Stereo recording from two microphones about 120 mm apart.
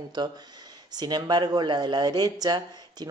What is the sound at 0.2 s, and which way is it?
Speech, 35° right (ahead or behind).